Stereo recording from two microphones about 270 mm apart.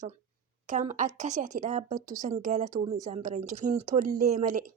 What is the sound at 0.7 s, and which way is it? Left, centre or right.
A woman's voice, right.